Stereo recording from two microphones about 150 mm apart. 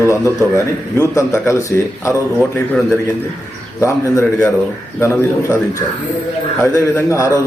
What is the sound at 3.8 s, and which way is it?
A man's voice, 20° left (ahead or behind).